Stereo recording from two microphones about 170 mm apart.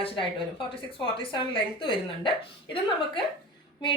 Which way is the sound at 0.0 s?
30° left (ahead or behind).